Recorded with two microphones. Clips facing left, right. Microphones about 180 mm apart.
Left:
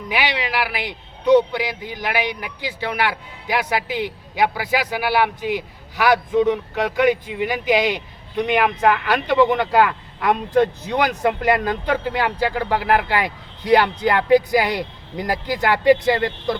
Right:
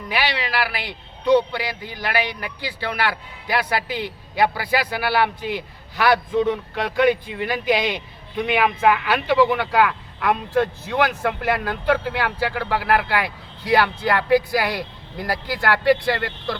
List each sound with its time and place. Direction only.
0.1 s speech: 15° left (ahead or behind)
8.4 s speech: 5° right (ahead or behind)
9.8 s speech: 10° left (ahead or behind)